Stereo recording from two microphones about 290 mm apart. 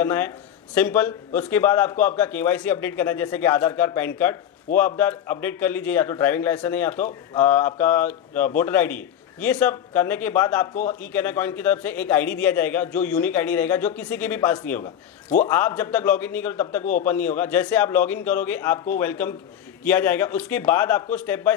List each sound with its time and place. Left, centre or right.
0.0 s a man's voice: centre
15.2 s a man's voice: left
15.5 s a man's voice: centre